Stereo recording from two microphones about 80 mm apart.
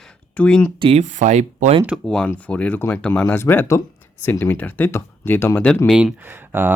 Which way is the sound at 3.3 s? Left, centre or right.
Left.